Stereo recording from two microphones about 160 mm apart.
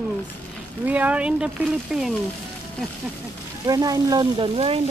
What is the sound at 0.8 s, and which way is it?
Speech, 10° right (ahead or behind).